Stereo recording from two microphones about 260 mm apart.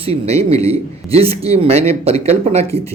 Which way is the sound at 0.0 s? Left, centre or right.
Right.